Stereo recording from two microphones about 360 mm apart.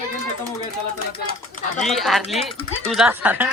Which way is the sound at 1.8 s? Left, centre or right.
Centre.